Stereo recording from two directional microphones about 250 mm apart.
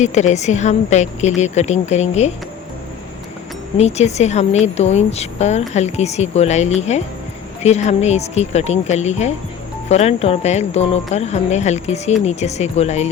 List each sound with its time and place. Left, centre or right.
0.0 s a woman's voice: left
3.8 s a woman's voice: left